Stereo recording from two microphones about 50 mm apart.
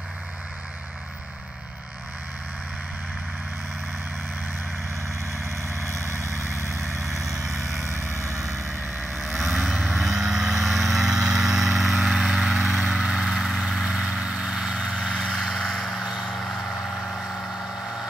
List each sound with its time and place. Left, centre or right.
5.3 s vehicle: right
6.5 s vehicle: right
7.3 s vehicle: right
9.4 s vehicle: centre
13.3 s vehicle: centre
13.7 s vehicle: centre